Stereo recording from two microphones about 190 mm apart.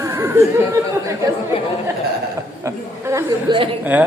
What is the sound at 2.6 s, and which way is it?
Chatter, 15° right (ahead or behind).